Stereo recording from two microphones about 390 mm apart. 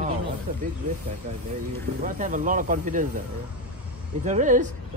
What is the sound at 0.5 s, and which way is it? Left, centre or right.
Speech, centre.